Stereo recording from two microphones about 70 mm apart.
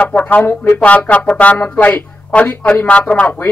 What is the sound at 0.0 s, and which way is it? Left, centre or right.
Speech, left.